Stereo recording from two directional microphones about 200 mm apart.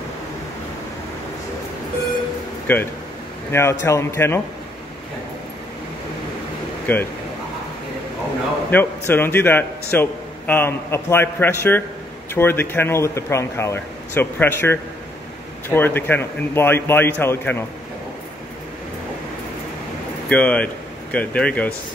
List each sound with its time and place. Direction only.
2.6 s a man's voice: 10° left (ahead or behind)
6.9 s a man's voice: 10° left (ahead or behind)
8.6 s a man's voice: 10° left (ahead or behind)
20.2 s speech: 5° left (ahead or behind)